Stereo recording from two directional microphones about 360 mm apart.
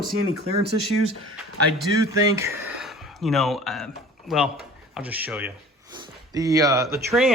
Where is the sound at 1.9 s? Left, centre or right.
Left.